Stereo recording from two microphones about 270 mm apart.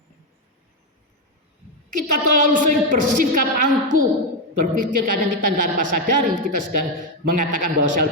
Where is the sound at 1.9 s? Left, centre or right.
Right.